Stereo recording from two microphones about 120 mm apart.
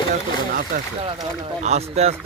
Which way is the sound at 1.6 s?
65° right (ahead or behind).